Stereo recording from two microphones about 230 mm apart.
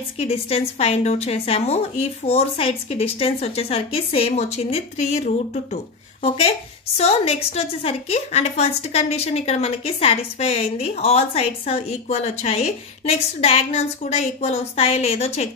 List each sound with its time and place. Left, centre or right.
0.2 s a woman's voice: left